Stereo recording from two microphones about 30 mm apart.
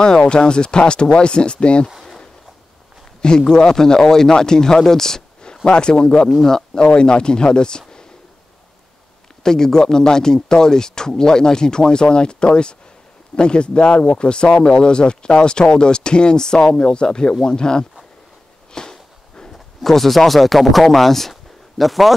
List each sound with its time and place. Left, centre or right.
0.3 s speech: left
3.2 s speech: left
5.7 s speech: left
6.8 s speech: left
9.4 s speech: centre
18.7 s a sound: left
19.5 s speech: centre